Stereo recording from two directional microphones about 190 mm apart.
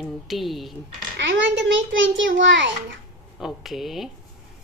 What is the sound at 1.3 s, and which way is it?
A child's voice, 75° right (ahead or behind).